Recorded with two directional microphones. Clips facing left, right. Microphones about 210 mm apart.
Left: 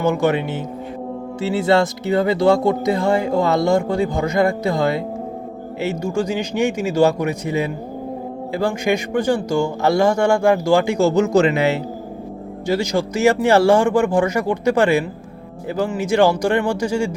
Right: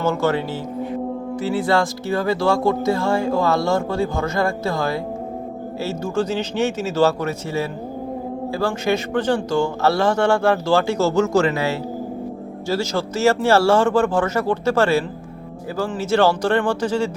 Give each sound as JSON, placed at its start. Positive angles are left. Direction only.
{"t": 0.0, "sound": "a man's voice", "side_deg": 15}